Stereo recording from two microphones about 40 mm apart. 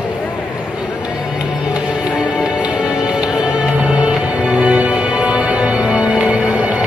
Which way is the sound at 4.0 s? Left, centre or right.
Right.